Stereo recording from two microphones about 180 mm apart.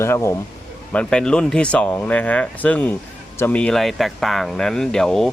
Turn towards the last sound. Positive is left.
turn(degrees=5)  # may be behind; listen again after turning